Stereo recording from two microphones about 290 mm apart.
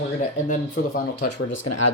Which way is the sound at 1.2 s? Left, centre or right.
Left.